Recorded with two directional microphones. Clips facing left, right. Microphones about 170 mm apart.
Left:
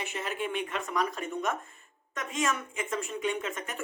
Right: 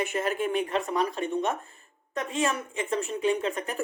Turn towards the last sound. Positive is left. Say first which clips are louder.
# right 6 dB
turn(degrees=-35)  # may be behind; listen again after turning